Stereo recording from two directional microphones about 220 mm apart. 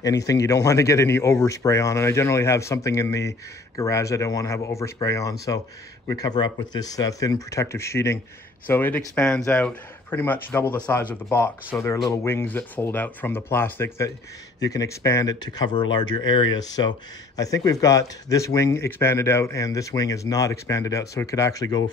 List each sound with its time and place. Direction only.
0.0 s speech: 15° left (ahead or behind)